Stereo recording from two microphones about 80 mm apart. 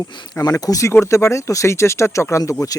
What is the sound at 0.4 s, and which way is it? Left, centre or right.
Speech, left.